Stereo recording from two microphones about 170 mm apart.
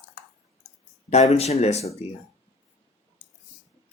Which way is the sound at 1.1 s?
40° left (ahead or behind).